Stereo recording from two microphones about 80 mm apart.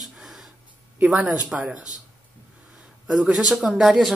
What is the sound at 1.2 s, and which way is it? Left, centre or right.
Speech, centre.